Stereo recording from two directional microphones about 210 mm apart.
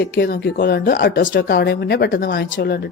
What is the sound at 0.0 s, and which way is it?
A woman's voice, 50° left (ahead or behind).